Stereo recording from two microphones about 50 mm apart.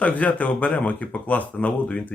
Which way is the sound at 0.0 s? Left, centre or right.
Left.